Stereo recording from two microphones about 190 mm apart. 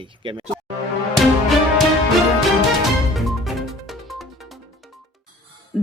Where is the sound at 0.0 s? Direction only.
25° right (ahead or behind).